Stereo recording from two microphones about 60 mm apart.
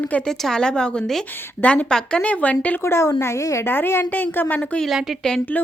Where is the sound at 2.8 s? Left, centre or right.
Left.